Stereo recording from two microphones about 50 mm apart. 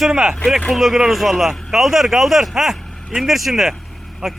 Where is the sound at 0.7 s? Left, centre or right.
Centre.